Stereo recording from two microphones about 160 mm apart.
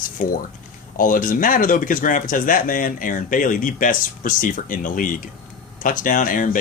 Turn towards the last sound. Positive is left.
turn(degrees=60)  # may be behind; listen again after turning